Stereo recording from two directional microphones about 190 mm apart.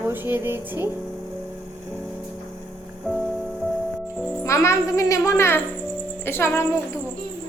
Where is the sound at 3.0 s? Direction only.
Centre (ahead or behind).